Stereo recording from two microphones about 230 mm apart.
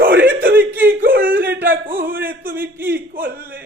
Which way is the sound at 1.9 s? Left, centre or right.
Right.